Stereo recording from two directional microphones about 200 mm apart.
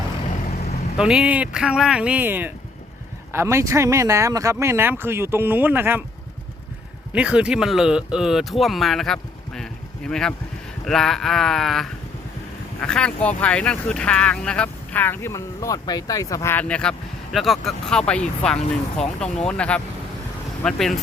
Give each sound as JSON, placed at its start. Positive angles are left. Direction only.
{"t": 0.3, "sound": "vehicle", "side_deg": 35}
{"t": 0.9, "sound": "speech", "side_deg": -5}
{"t": 7.1, "sound": "speech", "side_deg": -5}